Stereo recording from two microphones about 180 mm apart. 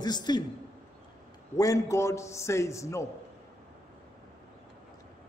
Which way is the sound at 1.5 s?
20° left (ahead or behind).